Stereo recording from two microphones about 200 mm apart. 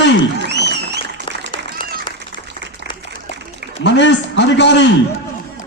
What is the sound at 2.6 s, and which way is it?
Applause, 60° right (ahead or behind).